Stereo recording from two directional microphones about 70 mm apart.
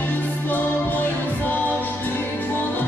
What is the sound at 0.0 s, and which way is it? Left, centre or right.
Music, left.